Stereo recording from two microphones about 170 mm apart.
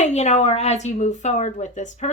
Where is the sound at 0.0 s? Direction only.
40° left (ahead or behind).